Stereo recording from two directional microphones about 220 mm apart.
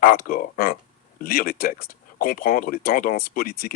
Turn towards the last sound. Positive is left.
turn(degrees=40)  # may be behind; listen again after turning